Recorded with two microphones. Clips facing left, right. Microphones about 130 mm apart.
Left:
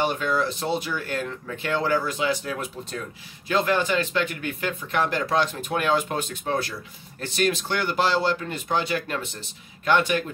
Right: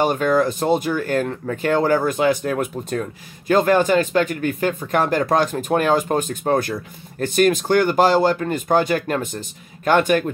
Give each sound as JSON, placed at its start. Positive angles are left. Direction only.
{"t": 0.0, "sound": "speech", "side_deg": -45}